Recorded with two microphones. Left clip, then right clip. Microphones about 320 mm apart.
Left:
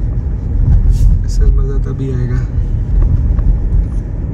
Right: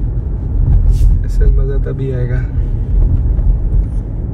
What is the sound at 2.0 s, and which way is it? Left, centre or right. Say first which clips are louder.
Speech: right 1 dB; centre.